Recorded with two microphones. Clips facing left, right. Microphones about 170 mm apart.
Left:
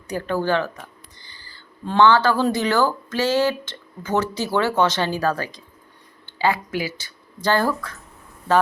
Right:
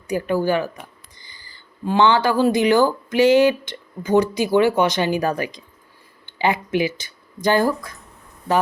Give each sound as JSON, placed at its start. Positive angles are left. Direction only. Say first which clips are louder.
{"t": 0.1, "sound": "speech", "louder": "right 2 dB", "side_deg": -10}